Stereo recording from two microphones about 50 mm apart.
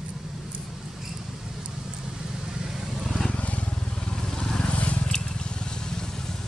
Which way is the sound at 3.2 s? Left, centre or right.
Left.